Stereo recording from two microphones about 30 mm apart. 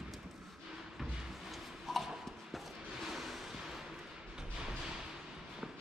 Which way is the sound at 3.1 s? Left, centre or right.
Centre.